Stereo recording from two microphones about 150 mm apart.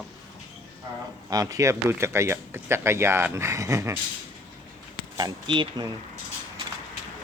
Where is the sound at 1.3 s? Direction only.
25° right (ahead or behind).